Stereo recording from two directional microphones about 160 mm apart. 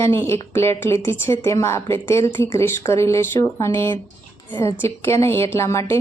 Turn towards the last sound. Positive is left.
turn(degrees=15)  # may be behind; listen again after turning